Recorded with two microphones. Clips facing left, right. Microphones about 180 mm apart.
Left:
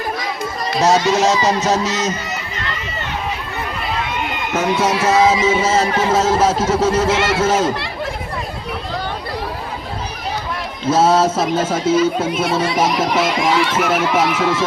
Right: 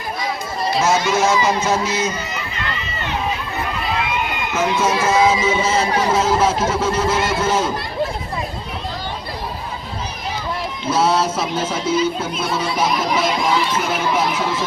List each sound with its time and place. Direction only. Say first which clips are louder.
0.8 s speech: left 4 dB; 35° left (ahead or behind)
4.5 s speech: left 2 dB; 70° left (ahead or behind)
5.0 s speech: left 3 dB; 40° left (ahead or behind)
7.1 s speech: left 3 dB; 85° left
10.8 s speech: left 4 dB; 45° left (ahead or behind)
12.5 s speech: even; 90° left